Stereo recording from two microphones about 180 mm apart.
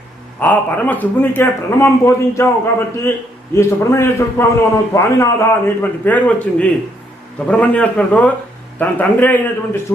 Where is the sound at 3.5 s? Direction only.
15° left (ahead or behind).